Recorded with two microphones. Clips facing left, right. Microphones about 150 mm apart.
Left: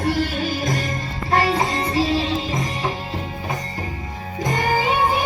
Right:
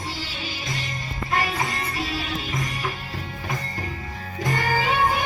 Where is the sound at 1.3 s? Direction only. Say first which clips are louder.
Left 7 dB; 35° left (ahead or behind).